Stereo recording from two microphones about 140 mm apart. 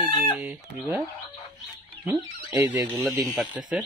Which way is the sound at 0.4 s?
10° right (ahead or behind).